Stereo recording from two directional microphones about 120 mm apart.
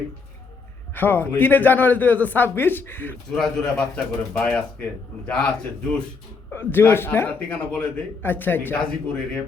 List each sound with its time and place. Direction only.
0.9 s speech: 15° left (ahead or behind)
3.3 s a man's voice: 5° left (ahead or behind)
6.5 s speech: 20° left (ahead or behind)